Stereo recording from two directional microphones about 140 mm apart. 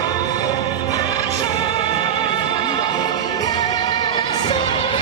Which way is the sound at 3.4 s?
30° left (ahead or behind).